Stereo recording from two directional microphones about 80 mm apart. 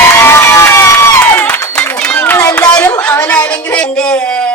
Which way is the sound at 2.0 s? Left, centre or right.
Centre.